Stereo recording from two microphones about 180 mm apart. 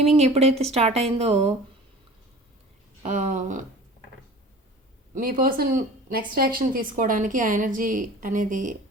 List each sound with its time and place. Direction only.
0.1 s speech: 35° right (ahead or behind)
3.0 s speech: 45° right (ahead or behind)
5.1 s speech: 50° right (ahead or behind)